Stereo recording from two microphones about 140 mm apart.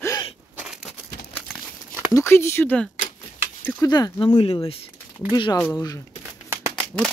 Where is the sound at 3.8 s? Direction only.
25° left (ahead or behind).